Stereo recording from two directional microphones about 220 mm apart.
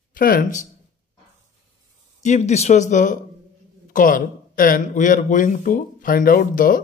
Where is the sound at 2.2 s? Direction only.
30° left (ahead or behind).